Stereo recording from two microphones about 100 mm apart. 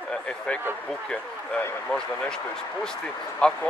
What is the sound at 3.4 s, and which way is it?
Speech, 10° left (ahead or behind).